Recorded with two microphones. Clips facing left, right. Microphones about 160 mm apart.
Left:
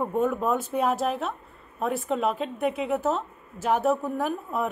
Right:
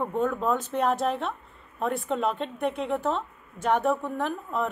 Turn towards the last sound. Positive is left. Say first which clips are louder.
# left 1 dB
turn(degrees=10)  # may be behind; listen again after turning